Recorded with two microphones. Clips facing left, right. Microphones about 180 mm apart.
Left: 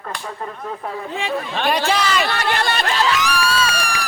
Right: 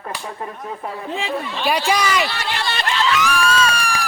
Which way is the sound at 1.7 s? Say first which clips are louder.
Even; 10° right (ahead or behind).